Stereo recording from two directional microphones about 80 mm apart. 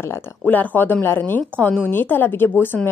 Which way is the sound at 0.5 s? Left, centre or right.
Left.